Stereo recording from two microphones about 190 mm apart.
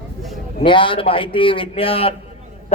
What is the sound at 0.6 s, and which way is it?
A man's voice, 25° left (ahead or behind).